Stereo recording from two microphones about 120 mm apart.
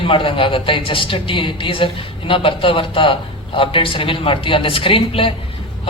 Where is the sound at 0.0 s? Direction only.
50° left (ahead or behind).